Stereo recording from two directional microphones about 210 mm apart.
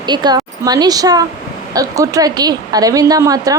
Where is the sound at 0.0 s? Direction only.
20° right (ahead or behind).